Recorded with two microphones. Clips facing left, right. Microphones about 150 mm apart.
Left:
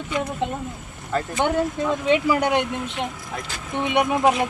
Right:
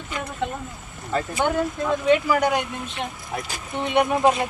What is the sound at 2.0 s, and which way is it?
Speech, 20° left (ahead or behind).